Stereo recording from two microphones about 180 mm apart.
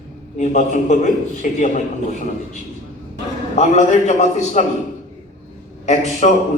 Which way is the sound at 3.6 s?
40° left (ahead or behind).